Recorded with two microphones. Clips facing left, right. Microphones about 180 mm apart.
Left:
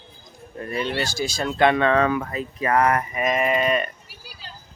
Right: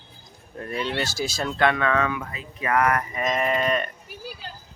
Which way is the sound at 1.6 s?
25° left (ahead or behind).